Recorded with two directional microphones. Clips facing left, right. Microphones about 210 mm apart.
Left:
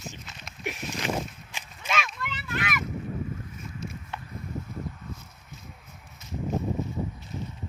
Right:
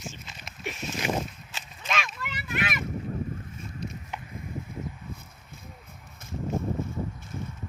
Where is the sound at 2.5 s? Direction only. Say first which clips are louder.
Right 1 dB; 25° right (ahead or behind).